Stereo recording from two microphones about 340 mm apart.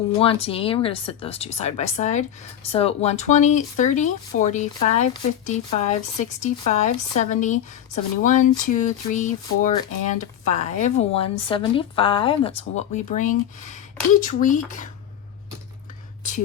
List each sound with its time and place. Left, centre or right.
0.2 s speech: centre